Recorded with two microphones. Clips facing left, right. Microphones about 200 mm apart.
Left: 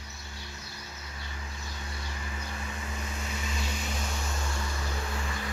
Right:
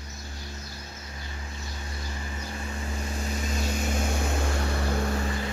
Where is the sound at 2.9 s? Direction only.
30° right (ahead or behind).